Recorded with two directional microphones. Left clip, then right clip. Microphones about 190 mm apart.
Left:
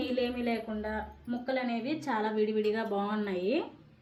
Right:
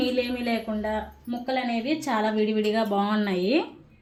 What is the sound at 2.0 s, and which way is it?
Speech, 40° right (ahead or behind).